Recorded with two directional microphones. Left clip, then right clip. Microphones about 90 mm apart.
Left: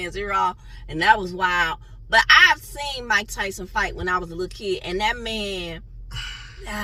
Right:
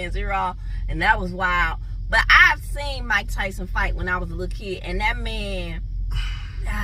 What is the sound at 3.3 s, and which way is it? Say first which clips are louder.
Speech: left 1 dB; 45° right (ahead or behind).